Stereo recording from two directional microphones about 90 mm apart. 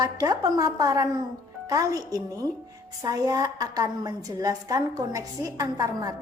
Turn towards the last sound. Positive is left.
turn(degrees=-40)  # may be behind; listen again after turning